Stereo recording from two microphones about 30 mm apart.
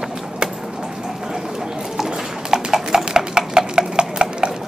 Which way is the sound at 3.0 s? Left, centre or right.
Right.